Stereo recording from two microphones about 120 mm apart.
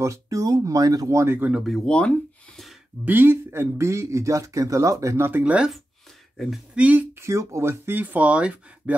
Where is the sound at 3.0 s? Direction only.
15° right (ahead or behind).